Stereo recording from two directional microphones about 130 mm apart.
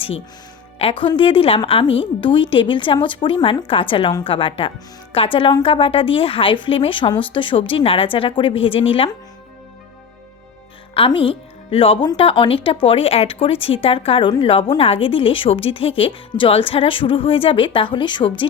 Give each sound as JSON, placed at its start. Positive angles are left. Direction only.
{"t": 0.8, "sound": "speech", "side_deg": 45}
{"t": 10.9, "sound": "speech", "side_deg": 45}